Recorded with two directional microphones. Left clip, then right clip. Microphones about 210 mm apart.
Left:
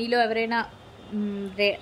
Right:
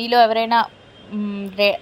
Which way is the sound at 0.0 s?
15° right (ahead or behind).